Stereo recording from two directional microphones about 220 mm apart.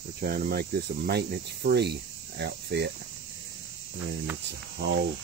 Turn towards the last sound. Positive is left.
turn(degrees=-45)  # may be behind; listen again after turning